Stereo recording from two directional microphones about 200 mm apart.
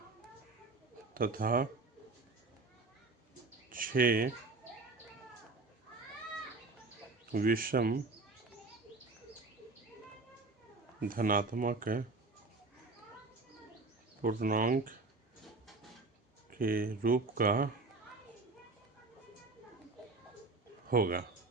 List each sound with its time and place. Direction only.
1.1 s speech: 45° right (ahead or behind)
3.7 s a sound: 45° right (ahead or behind)
7.3 s speech: 50° right (ahead or behind)
11.0 s speech: 45° right (ahead or behind)
14.2 s speech: 45° right (ahead or behind)
16.5 s speech: 45° right (ahead or behind)
20.9 s speech: 45° right (ahead or behind)